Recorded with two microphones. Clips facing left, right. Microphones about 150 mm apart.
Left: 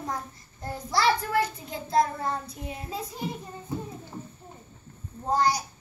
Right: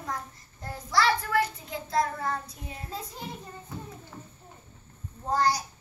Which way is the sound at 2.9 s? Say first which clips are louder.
Left 1 dB; 10° left (ahead or behind).